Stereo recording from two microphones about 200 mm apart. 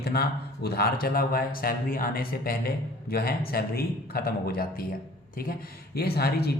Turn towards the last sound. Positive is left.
turn(degrees=55)  # may be behind; listen again after turning